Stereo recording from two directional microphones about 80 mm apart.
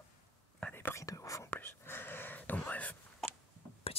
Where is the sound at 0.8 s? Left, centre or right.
Left.